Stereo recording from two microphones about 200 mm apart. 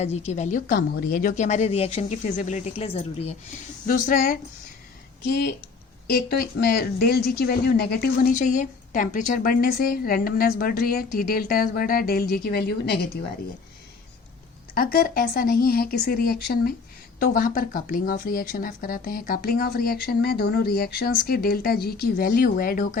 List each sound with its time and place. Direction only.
0.0 s a woman's voice: 35° left (ahead or behind)
3.8 s speech: 40° left (ahead or behind)
5.3 s speech: 55° left (ahead or behind)
14.8 s speech: 45° left (ahead or behind)